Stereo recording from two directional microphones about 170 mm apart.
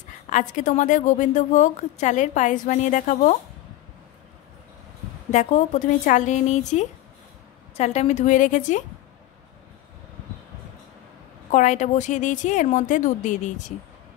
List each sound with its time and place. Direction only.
0.3 s a woman's voice: 45° left (ahead or behind)
5.3 s a woman's voice: 40° left (ahead or behind)
11.5 s a woman's voice: 45° left (ahead or behind)